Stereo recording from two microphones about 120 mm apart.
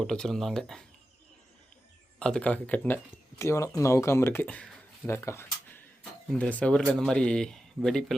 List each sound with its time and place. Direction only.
0.0 s speech: 5° left (ahead or behind)
2.1 s speech: 10° left (ahead or behind)
5.0 s a sound: 20° left (ahead or behind)
6.4 s speech: 10° left (ahead or behind)